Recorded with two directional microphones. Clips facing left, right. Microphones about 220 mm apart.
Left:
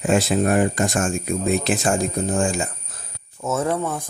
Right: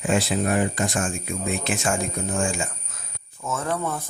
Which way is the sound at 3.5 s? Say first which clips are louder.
Left 5 dB; 25° left (ahead or behind).